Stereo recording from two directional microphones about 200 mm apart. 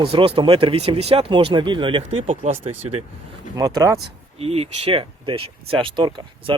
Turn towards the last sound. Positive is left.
turn(degrees=-25)  # may be behind; listen again after turning